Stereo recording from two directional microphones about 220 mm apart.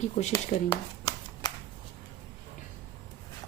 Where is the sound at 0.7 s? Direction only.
15° left (ahead or behind).